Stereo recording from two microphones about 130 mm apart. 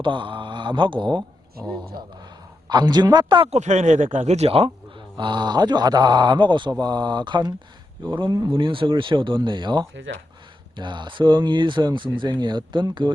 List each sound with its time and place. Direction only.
0.0 s speech: 40° right (ahead or behind)
2.6 s speech: 35° right (ahead or behind)
3.5 s speech: 60° right (ahead or behind); by 13.1 s 35° right (ahead or behind)